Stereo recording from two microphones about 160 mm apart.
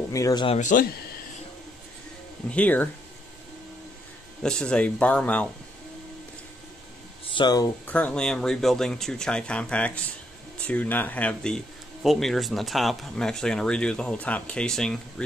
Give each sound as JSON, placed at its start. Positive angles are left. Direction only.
{"t": 0.1, "sound": "speech", "side_deg": 20}
{"t": 0.5, "sound": "speech", "side_deg": 50}
{"t": 2.5, "sound": "speech", "side_deg": 10}
{"t": 4.4, "sound": "speech", "side_deg": 5}
{"t": 7.3, "sound": "speech", "side_deg": 25}
{"t": 7.8, "sound": "speech", "side_deg": 10}